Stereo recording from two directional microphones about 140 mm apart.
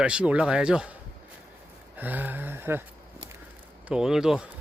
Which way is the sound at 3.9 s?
5° right (ahead or behind).